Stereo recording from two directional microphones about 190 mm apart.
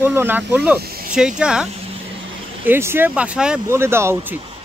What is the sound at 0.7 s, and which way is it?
Speech, 55° right (ahead or behind).